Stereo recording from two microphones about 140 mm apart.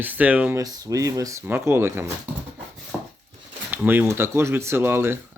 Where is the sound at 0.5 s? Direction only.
25° right (ahead or behind).